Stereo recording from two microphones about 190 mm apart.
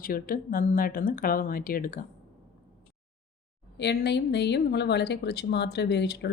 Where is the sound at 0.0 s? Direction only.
50° left (ahead or behind).